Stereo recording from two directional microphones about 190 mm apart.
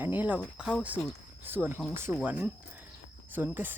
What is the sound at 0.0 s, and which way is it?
Speech, 10° right (ahead or behind).